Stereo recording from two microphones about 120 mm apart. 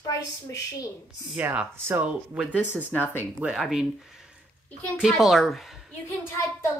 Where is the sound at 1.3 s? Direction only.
15° right (ahead or behind).